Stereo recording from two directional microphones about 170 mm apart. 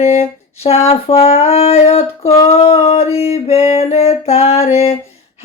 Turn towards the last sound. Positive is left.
turn(degrees=35)  # may be behind; listen again after turning